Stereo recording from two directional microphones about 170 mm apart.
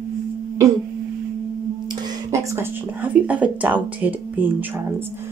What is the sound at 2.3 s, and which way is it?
Speech, 15° right (ahead or behind).